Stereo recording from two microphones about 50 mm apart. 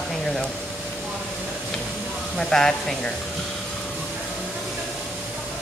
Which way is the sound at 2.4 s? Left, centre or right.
Centre.